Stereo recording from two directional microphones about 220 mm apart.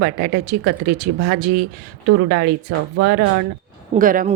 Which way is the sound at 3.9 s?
40° right (ahead or behind).